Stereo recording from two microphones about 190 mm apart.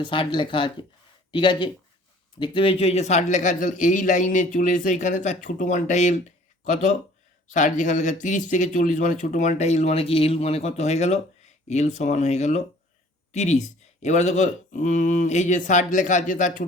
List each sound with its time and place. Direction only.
0.0 s a man's voice: 25° left (ahead or behind)
7.5 s a man's voice: 40° left (ahead or behind)